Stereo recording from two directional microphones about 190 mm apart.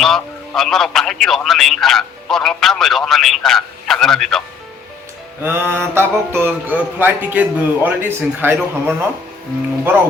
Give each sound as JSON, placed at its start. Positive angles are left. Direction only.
{"t": 0.0, "sound": "speech", "side_deg": 0}
{"t": 5.4, "sound": "mantra", "side_deg": -10}